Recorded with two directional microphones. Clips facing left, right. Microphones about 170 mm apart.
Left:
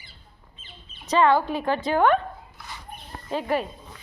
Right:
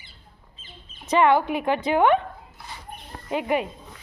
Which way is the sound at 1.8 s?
20° right (ahead or behind).